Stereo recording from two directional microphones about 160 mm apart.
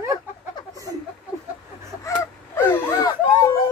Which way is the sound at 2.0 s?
15° left (ahead or behind).